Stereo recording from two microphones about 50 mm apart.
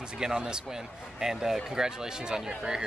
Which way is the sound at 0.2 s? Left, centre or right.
Centre.